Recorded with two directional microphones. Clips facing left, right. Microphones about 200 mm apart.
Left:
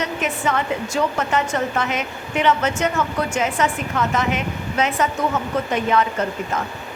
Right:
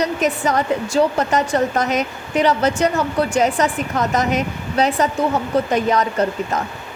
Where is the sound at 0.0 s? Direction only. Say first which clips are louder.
Right 4 dB; 40° right (ahead or behind).